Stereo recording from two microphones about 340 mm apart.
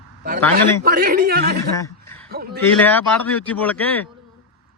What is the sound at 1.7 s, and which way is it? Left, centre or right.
Speech, centre.